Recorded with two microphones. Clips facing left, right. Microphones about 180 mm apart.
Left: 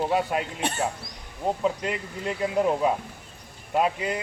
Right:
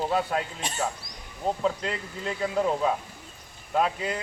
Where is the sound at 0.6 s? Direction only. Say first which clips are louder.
Left 5 dB; 60° left (ahead or behind).